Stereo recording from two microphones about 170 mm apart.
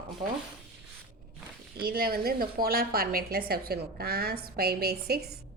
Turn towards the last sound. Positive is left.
turn(degrees=-70)  # may be behind; listen again after turning